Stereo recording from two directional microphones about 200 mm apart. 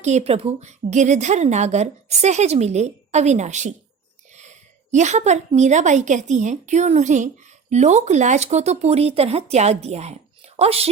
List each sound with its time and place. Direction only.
0.0 s a woman's voice: 35° right (ahead or behind)